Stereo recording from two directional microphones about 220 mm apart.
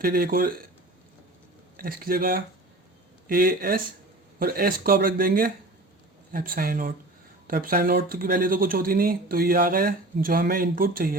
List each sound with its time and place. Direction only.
0.0 s speech: 40° right (ahead or behind)
1.7 s speech: 40° right (ahead or behind)